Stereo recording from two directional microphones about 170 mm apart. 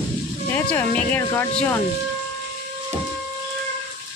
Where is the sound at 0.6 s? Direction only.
10° left (ahead or behind).